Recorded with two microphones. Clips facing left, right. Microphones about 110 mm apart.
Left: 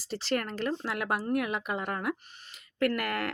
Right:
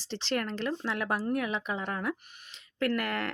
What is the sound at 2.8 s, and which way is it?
Speech, 55° left (ahead or behind).